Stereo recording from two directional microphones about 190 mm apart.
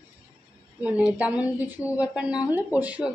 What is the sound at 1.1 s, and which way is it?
A woman's voice, 5° right (ahead or behind).